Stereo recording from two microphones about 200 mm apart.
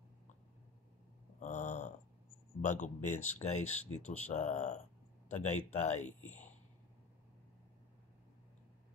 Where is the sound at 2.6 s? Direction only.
40° left (ahead or behind).